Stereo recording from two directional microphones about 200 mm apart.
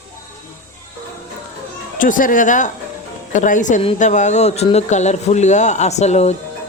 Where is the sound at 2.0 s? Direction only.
40° left (ahead or behind).